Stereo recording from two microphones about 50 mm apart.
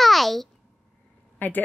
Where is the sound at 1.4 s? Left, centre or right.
Left.